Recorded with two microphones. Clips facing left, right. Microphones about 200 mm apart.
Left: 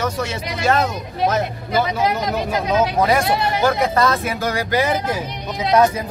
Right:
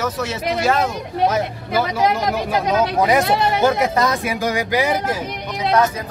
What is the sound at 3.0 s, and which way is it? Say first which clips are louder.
Speech: right 1 dB; 20° right (ahead or behind).